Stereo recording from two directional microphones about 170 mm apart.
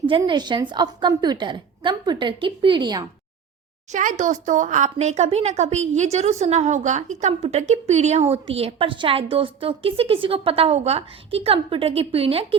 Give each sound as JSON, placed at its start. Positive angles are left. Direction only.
{"t": 0.0, "sound": "a woman's voice", "side_deg": -30}
{"t": 3.9, "sound": "speech", "side_deg": -45}